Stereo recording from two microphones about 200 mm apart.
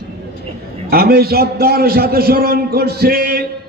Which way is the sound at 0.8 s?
50° right (ahead or behind).